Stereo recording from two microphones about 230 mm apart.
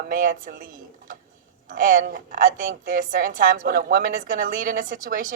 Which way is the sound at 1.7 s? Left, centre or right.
Right.